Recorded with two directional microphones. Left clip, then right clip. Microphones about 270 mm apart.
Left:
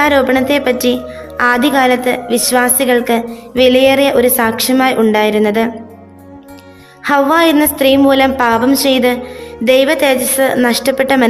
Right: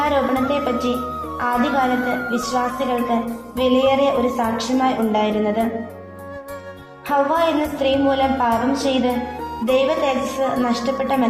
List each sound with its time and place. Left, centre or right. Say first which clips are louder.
0.0 s a woman's voice: left 8 dB; left
7.0 s a woman's voice: left 7 dB; left